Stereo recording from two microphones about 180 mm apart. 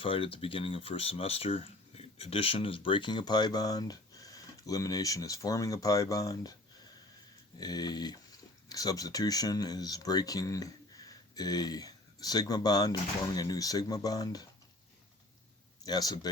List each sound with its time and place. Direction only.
0.0 s speech: 30° left (ahead or behind)
7.6 s speech: 20° left (ahead or behind)
15.8 s speech: 20° left (ahead or behind)